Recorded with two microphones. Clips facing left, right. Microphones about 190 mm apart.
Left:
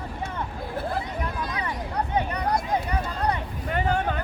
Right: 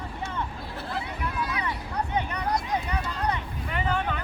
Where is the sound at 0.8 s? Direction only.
40° left (ahead or behind).